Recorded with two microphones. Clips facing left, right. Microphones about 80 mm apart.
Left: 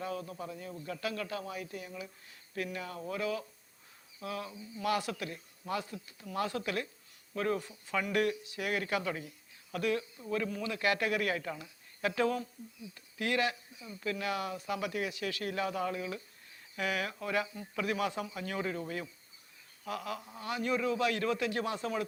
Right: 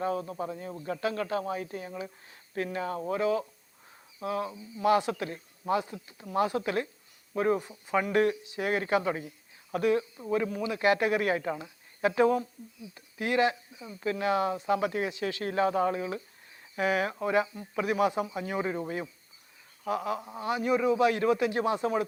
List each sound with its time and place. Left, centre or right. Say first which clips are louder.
0.0 s speech: right 7 dB; right